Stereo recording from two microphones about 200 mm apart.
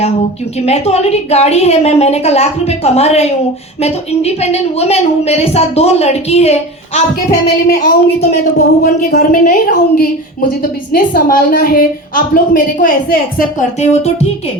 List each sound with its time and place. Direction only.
0.6 s a woman's voice: 30° left (ahead or behind)
8.8 s a woman's voice: 50° left (ahead or behind)
13.6 s a woman's voice: 35° left (ahead or behind)